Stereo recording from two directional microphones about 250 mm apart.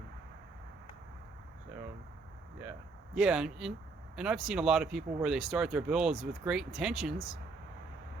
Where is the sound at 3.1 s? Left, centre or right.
Centre.